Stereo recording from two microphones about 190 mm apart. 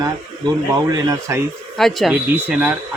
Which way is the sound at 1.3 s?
15° right (ahead or behind).